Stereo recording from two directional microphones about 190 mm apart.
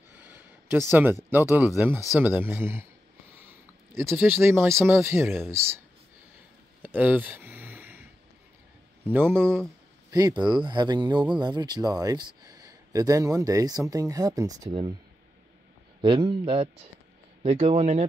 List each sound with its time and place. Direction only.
0.1 s a sound: 10° right (ahead or behind)
1.3 s speech: 10° right (ahead or behind)
3.9 s speech: 15° right (ahead or behind)
6.8 s a sound: 10° right (ahead or behind)
9.1 s speech: 10° right (ahead or behind)
9.4 s speech: 5° left (ahead or behind)
10.1 s speech: 20° right (ahead or behind)
16.0 s speech: 25° right (ahead or behind)